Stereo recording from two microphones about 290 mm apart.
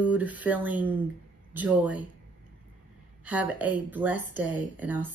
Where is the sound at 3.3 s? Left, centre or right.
Centre.